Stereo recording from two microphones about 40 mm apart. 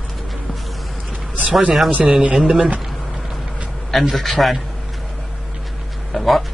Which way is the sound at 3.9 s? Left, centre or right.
Centre.